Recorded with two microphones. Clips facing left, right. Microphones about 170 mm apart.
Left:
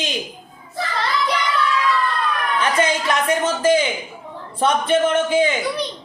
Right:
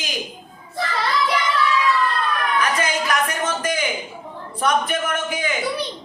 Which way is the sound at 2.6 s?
25° left (ahead or behind).